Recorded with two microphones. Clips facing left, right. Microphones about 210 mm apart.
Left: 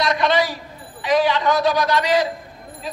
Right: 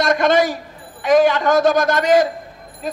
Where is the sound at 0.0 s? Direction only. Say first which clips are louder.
Right 4 dB; 50° right (ahead or behind).